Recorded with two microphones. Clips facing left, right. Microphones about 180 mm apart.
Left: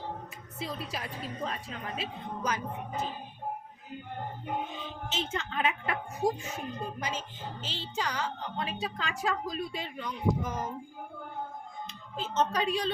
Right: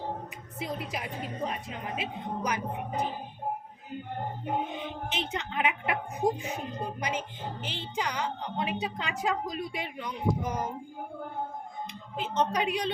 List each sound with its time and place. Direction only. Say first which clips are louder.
0.6 s a woman's voice: right 2 dB; 15° right (ahead or behind)
4.8 s a woman's voice: right 2 dB; 15° right (ahead or behind)
11.9 s a woman's voice: right 1 dB; 15° right (ahead or behind)